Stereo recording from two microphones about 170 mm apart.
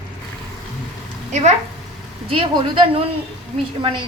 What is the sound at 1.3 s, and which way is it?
Speech, 45° right (ahead or behind).